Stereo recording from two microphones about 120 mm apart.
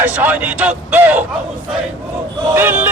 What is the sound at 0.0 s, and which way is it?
Speech, 15° right (ahead or behind).